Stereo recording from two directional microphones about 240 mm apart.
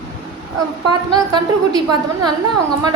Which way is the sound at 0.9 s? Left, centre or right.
Centre.